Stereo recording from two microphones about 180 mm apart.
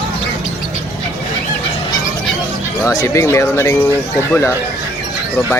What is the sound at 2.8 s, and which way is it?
Speech, 20° left (ahead or behind).